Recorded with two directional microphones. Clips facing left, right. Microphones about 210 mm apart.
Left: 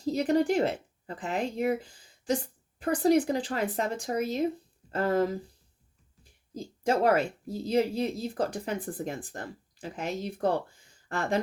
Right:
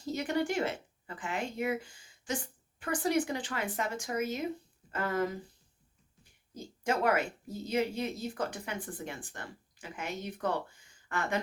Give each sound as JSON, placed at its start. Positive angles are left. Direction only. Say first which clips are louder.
{"t": 0.0, "sound": "speech", "louder": "left 7 dB", "side_deg": 35}
{"t": 6.5, "sound": "speech", "louder": "left 5 dB", "side_deg": 35}